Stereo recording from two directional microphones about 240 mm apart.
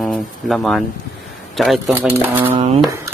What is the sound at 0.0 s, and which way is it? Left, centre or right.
Speech, centre.